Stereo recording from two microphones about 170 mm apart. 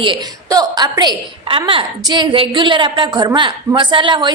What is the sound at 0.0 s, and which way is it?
A woman's voice, 25° right (ahead or behind).